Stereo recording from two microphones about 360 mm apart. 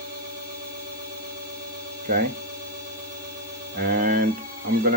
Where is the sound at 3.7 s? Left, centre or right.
Right.